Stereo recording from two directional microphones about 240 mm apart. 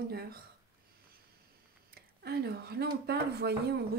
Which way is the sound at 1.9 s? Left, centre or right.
Right.